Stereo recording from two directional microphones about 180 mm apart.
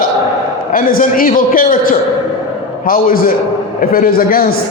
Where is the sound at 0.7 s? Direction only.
50° left (ahead or behind).